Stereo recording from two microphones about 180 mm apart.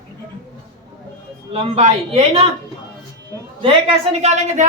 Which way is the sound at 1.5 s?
35° right (ahead or behind).